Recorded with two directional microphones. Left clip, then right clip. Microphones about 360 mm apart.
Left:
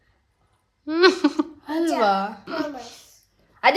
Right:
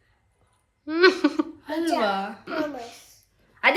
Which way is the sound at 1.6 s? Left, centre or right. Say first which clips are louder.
Left 4 dB; left.